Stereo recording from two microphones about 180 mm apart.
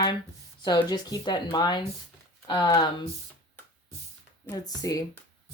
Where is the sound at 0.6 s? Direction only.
20° left (ahead or behind).